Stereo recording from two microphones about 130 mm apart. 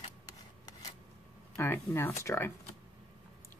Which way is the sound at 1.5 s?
15° left (ahead or behind).